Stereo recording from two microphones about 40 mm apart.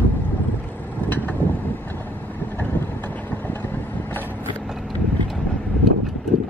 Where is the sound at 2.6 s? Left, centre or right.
Left.